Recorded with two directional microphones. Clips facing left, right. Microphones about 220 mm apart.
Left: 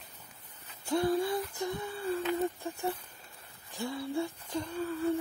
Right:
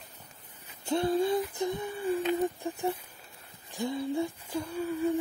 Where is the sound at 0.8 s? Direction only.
25° right (ahead or behind).